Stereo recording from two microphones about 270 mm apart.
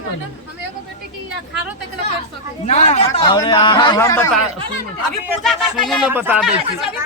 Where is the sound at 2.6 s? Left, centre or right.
Left.